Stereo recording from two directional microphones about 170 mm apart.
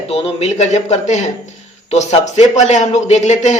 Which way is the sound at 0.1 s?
35° left (ahead or behind).